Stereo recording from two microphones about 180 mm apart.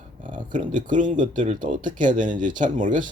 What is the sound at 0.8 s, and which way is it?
Speech, 45° right (ahead or behind).